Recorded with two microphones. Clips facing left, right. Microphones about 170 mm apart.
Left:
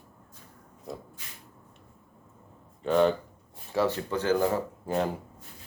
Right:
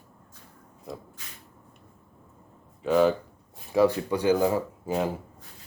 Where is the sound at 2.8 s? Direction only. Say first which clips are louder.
Right 2 dB; 5° right (ahead or behind).